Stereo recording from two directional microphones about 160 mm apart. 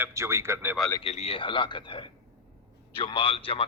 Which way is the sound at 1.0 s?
40° left (ahead or behind).